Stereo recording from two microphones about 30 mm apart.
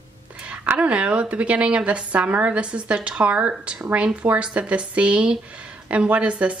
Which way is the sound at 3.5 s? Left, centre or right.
Right.